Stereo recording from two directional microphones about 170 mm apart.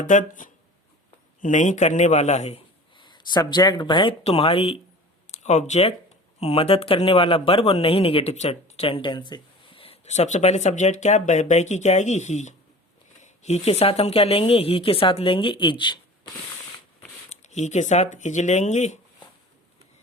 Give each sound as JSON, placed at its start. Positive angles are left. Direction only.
{"t": 0.0, "sound": "a man's voice", "side_deg": 45}
{"t": 17.2, "sound": "speech", "side_deg": 40}